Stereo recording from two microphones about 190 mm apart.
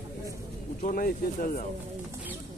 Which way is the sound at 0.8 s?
50° left (ahead or behind).